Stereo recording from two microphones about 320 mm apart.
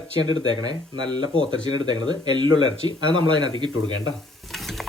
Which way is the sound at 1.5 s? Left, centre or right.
Left.